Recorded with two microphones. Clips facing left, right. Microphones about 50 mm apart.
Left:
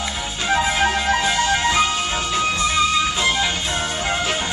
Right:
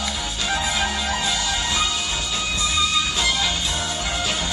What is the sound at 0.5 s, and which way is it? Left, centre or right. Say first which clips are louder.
Music: left 6 dB; left.